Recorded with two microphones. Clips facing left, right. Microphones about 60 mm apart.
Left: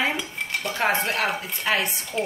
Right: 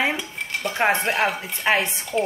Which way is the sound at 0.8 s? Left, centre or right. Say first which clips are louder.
Right 3 dB; centre.